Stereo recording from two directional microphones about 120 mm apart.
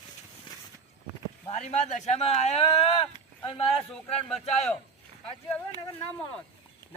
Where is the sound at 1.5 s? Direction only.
70° left (ahead or behind).